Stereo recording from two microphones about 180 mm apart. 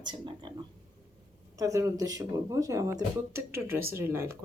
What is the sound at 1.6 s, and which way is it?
Speech, 20° right (ahead or behind).